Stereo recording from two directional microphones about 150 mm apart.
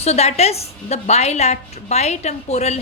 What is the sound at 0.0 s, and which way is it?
A woman's voice, 45° left (ahead or behind).